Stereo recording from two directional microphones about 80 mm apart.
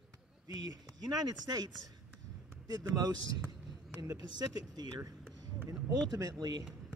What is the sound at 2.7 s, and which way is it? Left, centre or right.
Speech, right.